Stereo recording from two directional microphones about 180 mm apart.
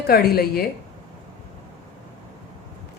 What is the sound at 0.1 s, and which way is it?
Speech, 60° left (ahead or behind).